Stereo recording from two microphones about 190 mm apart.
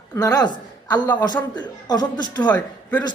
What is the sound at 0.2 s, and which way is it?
A woman's voice, 20° left (ahead or behind).